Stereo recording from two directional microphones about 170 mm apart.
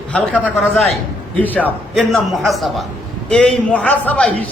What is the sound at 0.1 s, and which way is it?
A man's voice, 5° left (ahead or behind).